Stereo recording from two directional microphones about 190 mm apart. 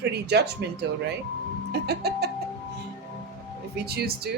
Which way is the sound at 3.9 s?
55° right (ahead or behind).